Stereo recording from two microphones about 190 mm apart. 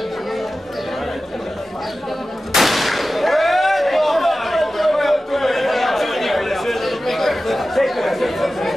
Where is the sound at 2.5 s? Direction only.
Centre (ahead or behind).